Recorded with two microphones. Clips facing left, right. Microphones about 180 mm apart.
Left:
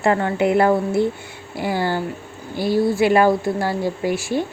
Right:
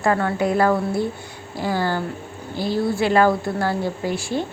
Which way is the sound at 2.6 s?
50° left (ahead or behind).